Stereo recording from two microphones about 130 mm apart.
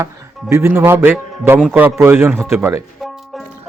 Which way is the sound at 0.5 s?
20° right (ahead or behind).